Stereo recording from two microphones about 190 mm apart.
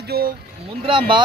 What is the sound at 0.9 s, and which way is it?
Speech, 25° right (ahead or behind).